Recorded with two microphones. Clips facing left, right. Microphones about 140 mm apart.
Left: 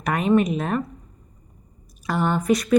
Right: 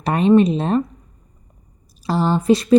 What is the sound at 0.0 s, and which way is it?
Speech, 30° right (ahead or behind).